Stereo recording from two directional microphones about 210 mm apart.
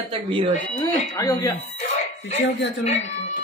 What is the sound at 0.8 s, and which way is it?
Speech, 15° left (ahead or behind).